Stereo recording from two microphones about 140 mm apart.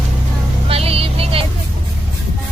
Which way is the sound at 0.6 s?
45° right (ahead or behind).